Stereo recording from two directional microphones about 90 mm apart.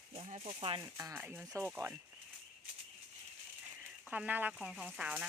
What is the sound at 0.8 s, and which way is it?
Speech, 30° right (ahead or behind).